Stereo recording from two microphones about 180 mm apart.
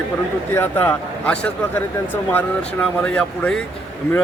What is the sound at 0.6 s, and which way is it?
Speech, 10° left (ahead or behind).